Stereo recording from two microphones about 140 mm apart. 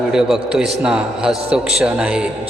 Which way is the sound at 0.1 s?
5° right (ahead or behind).